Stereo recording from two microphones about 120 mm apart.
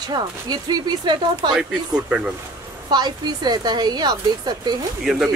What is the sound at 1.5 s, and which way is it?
Speech, 10° right (ahead or behind).